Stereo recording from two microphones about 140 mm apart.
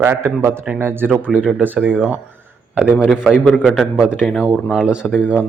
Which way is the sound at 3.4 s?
10° left (ahead or behind).